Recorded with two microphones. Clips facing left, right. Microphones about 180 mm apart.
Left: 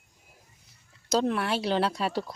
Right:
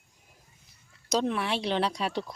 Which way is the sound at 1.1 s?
Centre (ahead or behind).